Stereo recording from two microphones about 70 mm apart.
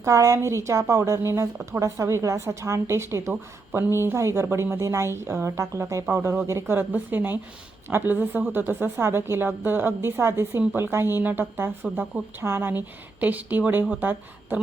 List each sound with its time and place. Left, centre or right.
0.0 s a woman's voice: right
6.1 s a woman's voice: right
13.1 s speech: right